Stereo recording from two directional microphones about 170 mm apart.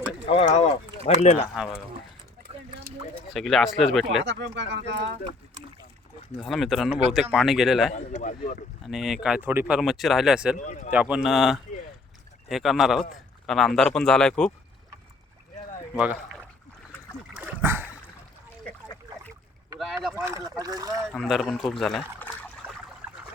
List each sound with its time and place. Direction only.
0.3 s speech: 40° left (ahead or behind)
1.5 s speech: 5° right (ahead or behind)
3.3 s speech: centre (ahead or behind)
4.2 s speech: 90° right
6.5 s speech: centre (ahead or behind)
7.9 s speech: 45° left (ahead or behind)
8.9 s speech: centre (ahead or behind)
10.6 s speech: 50° left (ahead or behind)
10.9 s speech: 5° right (ahead or behind)
16.0 s speech: 5° right (ahead or behind)
17.3 s a sound: 10° right (ahead or behind)
19.8 s boat: centre (ahead or behind)
20.1 s speech: 15° right (ahead or behind)
21.1 s speech: centre (ahead or behind)